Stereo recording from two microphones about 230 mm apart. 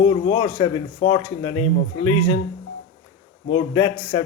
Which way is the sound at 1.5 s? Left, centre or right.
Left.